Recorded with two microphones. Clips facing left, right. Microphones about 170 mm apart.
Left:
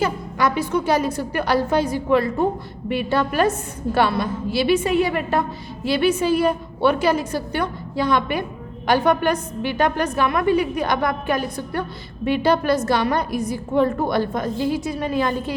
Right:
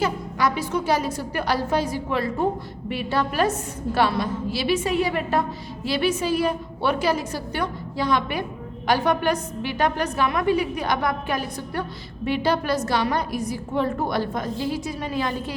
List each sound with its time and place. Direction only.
0.0 s a woman's voice: 55° left (ahead or behind)